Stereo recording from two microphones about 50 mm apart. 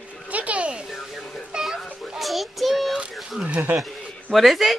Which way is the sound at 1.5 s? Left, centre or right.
Centre.